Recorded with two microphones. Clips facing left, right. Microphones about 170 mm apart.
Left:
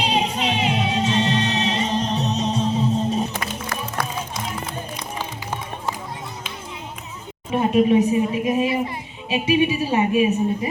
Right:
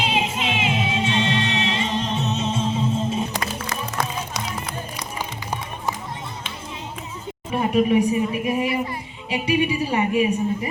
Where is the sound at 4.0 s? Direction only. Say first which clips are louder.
Right 2 dB; 25° right (ahead or behind).